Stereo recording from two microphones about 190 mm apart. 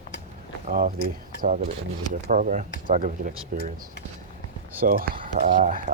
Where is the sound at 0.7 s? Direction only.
50° right (ahead or behind).